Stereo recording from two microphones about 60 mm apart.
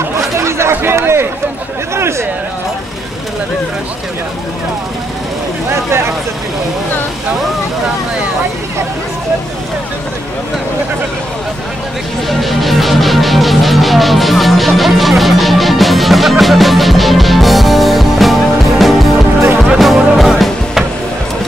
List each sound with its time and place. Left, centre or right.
0.4 s a sound: right
5.7 s vehicle: right
12.3 s music: centre